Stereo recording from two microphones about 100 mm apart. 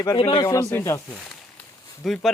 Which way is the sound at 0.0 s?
40° left (ahead or behind).